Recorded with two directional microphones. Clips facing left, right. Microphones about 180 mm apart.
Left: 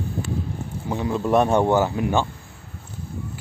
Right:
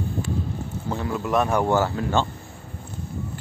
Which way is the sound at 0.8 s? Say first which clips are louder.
Left 4 dB; 20° left (ahead or behind).